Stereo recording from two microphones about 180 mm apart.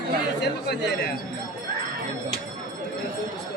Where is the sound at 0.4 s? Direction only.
70° left (ahead or behind).